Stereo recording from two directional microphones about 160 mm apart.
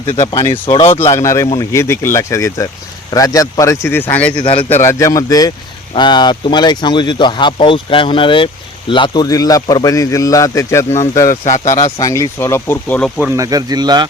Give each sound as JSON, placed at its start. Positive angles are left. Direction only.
{"t": 0.3, "sound": "speech", "side_deg": 30}
{"t": 1.1, "sound": "speech", "side_deg": 20}
{"t": 4.4, "sound": "speech", "side_deg": 35}
{"t": 4.8, "sound": "speech", "side_deg": 20}
{"t": 13.2, "sound": "speech", "side_deg": -20}